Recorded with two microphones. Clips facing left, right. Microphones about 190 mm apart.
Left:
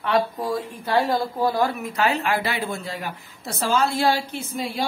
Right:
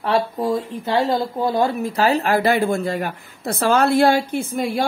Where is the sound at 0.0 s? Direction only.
25° right (ahead or behind).